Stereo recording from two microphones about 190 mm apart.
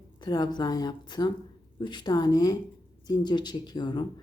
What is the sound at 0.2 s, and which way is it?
Speech, 20° left (ahead or behind).